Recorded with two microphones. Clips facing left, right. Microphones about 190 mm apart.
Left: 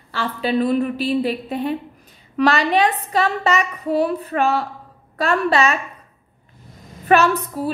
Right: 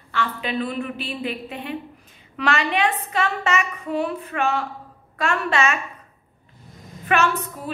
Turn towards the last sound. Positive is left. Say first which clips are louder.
# left 5 dB
turn(degrees=35)  # may be behind; listen again after turning